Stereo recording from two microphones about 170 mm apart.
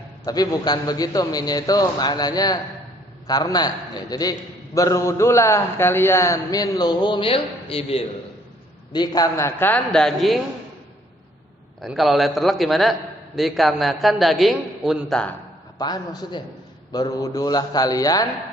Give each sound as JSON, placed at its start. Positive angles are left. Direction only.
{"t": 0.3, "sound": "a man's voice", "side_deg": 20}
{"t": 8.9, "sound": "a man's voice", "side_deg": 25}
{"t": 11.8, "sound": "a man's voice", "side_deg": 0}
{"t": 15.8, "sound": "a man's voice", "side_deg": 25}